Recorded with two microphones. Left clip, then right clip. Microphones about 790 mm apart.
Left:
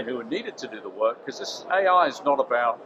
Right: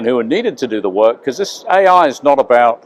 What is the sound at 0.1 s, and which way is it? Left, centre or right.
Speech, right.